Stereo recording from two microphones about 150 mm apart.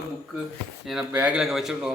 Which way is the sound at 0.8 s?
5° right (ahead or behind).